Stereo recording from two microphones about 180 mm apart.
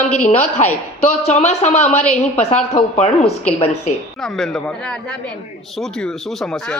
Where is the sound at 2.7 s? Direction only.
35° left (ahead or behind).